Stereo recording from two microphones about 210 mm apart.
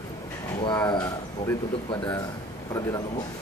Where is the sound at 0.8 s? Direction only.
20° left (ahead or behind).